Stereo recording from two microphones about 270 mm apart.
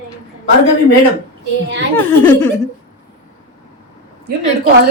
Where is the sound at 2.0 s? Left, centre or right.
Centre.